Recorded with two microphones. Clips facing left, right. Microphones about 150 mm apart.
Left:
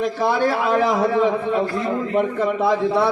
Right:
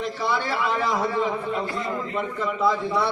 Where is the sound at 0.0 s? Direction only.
50° left (ahead or behind).